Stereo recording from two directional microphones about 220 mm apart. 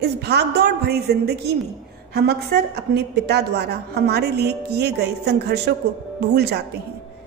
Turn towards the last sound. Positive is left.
turn(degrees=-50)  # may be behind; listen again after turning